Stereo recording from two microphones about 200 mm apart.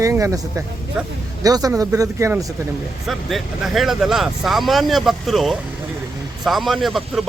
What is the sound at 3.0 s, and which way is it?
Speech, centre (ahead or behind).